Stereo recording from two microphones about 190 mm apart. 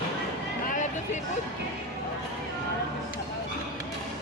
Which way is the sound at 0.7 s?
40° left (ahead or behind).